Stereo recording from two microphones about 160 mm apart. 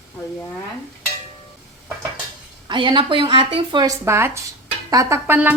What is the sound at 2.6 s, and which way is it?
A woman's voice, 30° right (ahead or behind).